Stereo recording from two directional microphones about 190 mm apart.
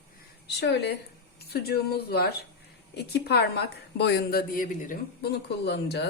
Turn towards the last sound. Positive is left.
turn(degrees=60)  # may be behind; listen again after turning